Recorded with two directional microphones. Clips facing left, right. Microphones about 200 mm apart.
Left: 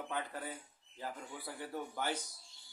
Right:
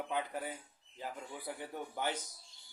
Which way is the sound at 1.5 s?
20° right (ahead or behind).